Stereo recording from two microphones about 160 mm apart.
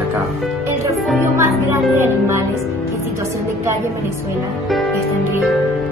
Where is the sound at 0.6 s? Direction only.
20° right (ahead or behind).